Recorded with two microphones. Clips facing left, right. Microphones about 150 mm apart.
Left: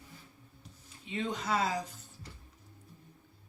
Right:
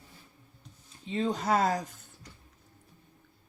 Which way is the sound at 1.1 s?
35° right (ahead or behind).